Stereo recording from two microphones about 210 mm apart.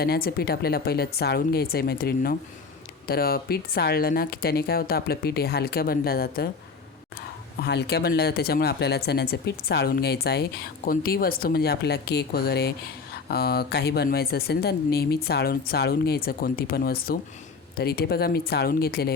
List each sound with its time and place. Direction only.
0.0 s speech: 45° left (ahead or behind)
7.6 s speech: 55° left (ahead or behind)